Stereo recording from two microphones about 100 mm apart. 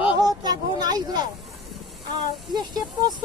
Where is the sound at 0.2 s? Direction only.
40° right (ahead or behind).